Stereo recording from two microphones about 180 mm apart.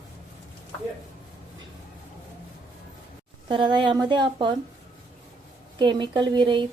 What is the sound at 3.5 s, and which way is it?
Speech, 25° right (ahead or behind).